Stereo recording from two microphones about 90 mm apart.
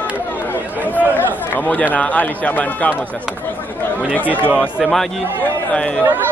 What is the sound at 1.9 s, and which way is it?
Speech, 15° left (ahead or behind).